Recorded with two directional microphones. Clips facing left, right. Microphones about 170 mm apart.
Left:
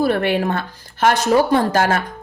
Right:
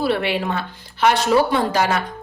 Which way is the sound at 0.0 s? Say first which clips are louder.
Left 3 dB; 50° left (ahead or behind).